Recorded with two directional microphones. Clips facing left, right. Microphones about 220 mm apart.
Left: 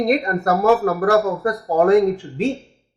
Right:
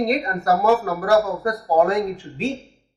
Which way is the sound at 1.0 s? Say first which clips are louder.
Left 2 dB; 55° left (ahead or behind).